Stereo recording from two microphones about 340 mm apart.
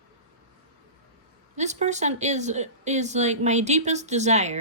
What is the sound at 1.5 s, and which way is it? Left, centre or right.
A woman's voice, right.